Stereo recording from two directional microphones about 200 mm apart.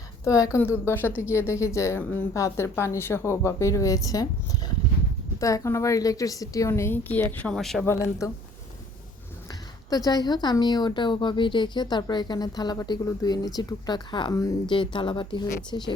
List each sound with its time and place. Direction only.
0.3 s a woman's voice: 15° left (ahead or behind)
9.5 s a woman's voice: 20° left (ahead or behind)